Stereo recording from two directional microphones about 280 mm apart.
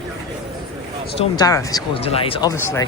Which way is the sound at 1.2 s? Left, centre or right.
Centre.